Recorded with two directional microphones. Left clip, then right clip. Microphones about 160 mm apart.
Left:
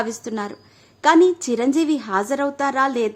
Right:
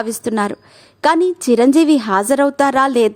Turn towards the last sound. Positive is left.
turn(degrees=-45)  # may be behind; listen again after turning